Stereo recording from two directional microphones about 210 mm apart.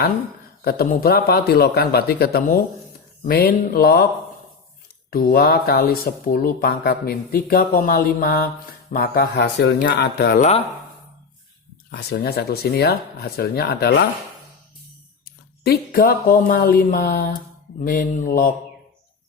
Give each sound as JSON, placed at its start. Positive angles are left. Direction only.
{"t": 0.6, "sound": "speech", "side_deg": 45}
{"t": 5.1, "sound": "speech", "side_deg": 45}
{"t": 11.9, "sound": "speech", "side_deg": 50}
{"t": 15.2, "sound": "speech", "side_deg": 45}